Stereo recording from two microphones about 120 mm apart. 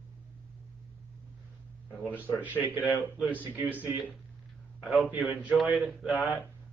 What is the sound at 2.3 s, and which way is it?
A man's voice, 15° right (ahead or behind).